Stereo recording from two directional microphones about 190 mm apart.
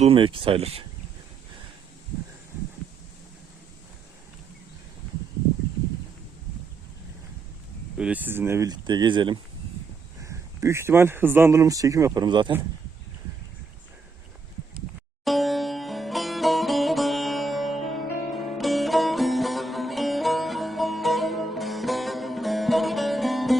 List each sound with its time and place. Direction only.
0.0 s speech: 30° right (ahead or behind)
7.9 s speech: 5° right (ahead or behind); by 12.5 s 25° right (ahead or behind)
15.2 s sitar: centre (ahead or behind)